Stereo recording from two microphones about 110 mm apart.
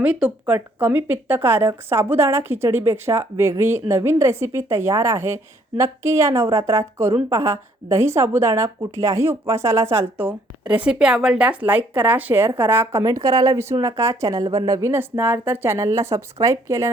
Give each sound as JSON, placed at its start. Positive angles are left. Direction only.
{"t": 0.0, "sound": "speech", "side_deg": -10}